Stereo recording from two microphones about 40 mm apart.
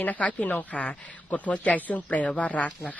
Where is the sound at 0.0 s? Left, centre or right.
Left.